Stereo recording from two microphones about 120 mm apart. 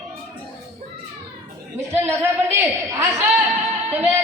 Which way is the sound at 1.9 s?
20° right (ahead or behind).